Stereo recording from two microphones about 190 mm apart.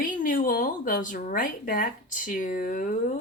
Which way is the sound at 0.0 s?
45° left (ahead or behind).